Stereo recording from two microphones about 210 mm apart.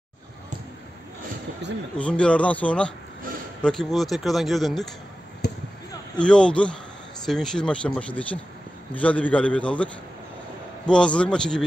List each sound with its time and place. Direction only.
1.6 s speech: 55° right (ahead or behind)
2.0 s speech: 5° left (ahead or behind)
5.4 s basketball bounce: 50° left (ahead or behind)
6.1 s speech: 5° left (ahead or behind)
10.9 s speech: 5° left (ahead or behind)